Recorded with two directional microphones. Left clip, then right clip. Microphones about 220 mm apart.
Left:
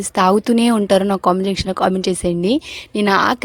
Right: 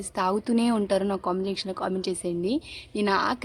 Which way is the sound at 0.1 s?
35° left (ahead or behind).